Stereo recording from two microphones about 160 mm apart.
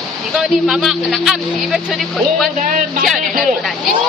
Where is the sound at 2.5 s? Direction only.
50° right (ahead or behind).